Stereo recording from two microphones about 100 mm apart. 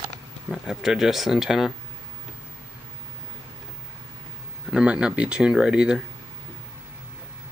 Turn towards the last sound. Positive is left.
turn(degrees=-10)  # may be behind; listen again after turning